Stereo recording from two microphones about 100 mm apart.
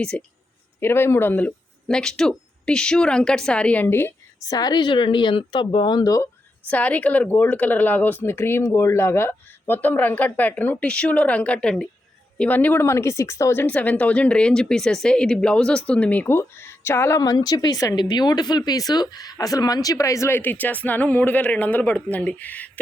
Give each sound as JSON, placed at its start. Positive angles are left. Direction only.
{"t": 0.0, "sound": "speech", "side_deg": 10}
{"t": 0.8, "sound": "speech", "side_deg": 25}
{"t": 4.4, "sound": "speech", "side_deg": 40}
{"t": 6.7, "sound": "speech", "side_deg": 15}
{"t": 13.7, "sound": "speech", "side_deg": 15}